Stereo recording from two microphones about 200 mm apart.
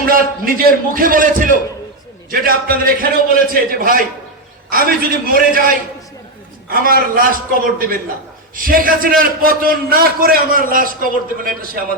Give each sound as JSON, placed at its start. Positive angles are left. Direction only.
{"t": 0.0, "sound": "a man's voice", "side_deg": -45}